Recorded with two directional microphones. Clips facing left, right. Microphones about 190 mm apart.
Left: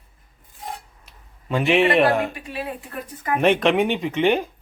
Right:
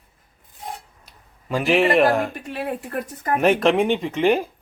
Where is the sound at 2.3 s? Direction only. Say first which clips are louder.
Right 3 dB; 55° right (ahead or behind).